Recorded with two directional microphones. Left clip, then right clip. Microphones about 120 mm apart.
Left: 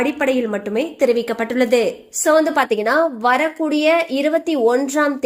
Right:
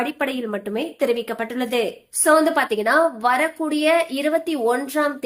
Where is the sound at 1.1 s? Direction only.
55° left (ahead or behind).